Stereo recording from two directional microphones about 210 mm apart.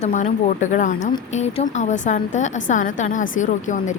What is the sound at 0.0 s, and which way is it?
A woman's voice, 35° left (ahead or behind).